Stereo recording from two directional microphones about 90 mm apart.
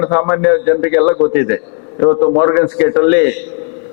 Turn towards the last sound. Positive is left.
turn(degrees=15)  # may be behind; listen again after turning